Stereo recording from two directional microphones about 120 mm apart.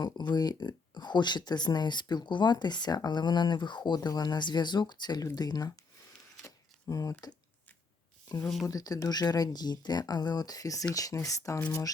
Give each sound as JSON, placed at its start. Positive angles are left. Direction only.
{"t": 0.0, "sound": "speech", "side_deg": 35}
{"t": 6.4, "sound": "a sound", "side_deg": 30}
{"t": 8.6, "sound": "speech", "side_deg": 30}